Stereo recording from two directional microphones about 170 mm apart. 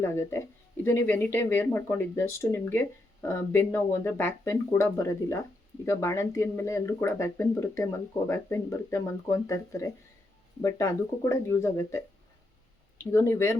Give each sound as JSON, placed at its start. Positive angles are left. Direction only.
{"t": 0.0, "sound": "speech", "side_deg": 15}
{"t": 13.1, "sound": "speech", "side_deg": 15}